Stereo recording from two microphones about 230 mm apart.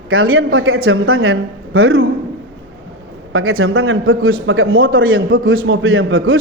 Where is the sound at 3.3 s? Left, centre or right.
Right.